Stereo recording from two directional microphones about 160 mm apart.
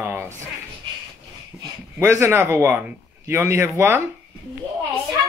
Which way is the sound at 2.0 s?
15° right (ahead or behind).